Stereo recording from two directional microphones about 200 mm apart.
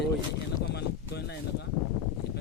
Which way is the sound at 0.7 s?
55° left (ahead or behind).